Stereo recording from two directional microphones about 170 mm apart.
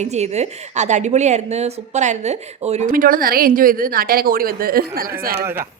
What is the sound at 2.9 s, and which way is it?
A woman's voice, 55° right (ahead or behind).